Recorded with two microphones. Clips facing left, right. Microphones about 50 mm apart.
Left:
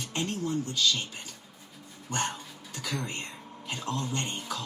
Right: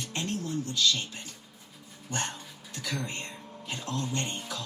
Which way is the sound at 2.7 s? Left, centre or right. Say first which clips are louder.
Even; left.